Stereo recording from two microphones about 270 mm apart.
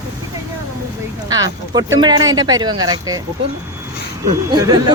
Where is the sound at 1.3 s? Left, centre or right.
Centre.